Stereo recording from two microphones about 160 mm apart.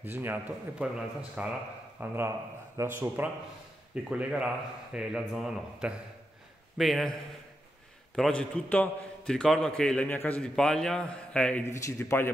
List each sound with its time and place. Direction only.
0.0 s a man's voice: 10° right (ahead or behind)
8.2 s a man's voice: 10° left (ahead or behind)
11.7 s a man's voice: 20° left (ahead or behind)